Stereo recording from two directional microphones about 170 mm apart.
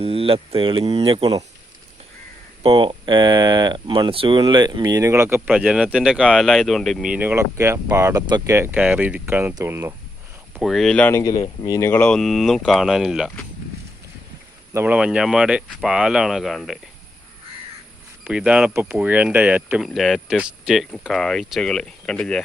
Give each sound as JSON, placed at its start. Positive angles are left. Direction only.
{"t": 0.0, "sound": "speech", "side_deg": -35}
{"t": 2.6, "sound": "speech", "side_deg": -30}
{"t": 10.5, "sound": "speech", "side_deg": 0}
{"t": 11.2, "sound": "speech", "side_deg": 20}
{"t": 14.7, "sound": "speech", "side_deg": -10}
{"t": 18.3, "sound": "speech", "side_deg": -5}